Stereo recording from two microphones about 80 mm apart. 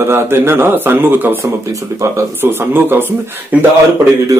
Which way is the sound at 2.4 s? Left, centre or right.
Right.